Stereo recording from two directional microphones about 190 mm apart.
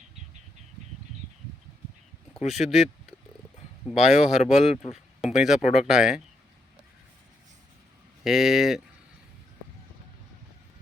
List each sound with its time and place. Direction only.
2.5 s speech: centre (ahead or behind)
3.8 s speech: centre (ahead or behind)
4.6 s speech: 35° left (ahead or behind)
5.2 s speech: centre (ahead or behind)
8.2 s speech: centre (ahead or behind)